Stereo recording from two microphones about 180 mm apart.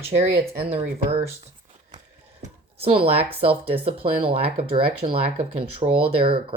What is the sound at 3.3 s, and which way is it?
Speech, 30° right (ahead or behind).